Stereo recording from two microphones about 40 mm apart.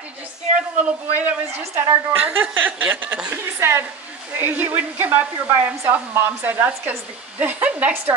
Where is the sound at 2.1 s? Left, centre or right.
Right.